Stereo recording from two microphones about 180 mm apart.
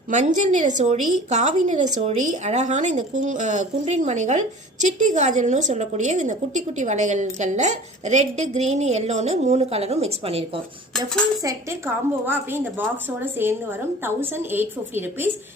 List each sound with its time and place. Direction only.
0.1 s a woman's voice: 40° right (ahead or behind)
11.4 s a woman's voice: 15° right (ahead or behind)